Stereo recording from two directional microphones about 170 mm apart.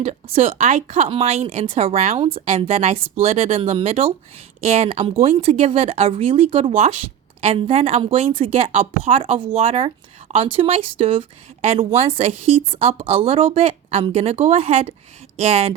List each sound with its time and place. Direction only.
0.0 s speech: 40° right (ahead or behind)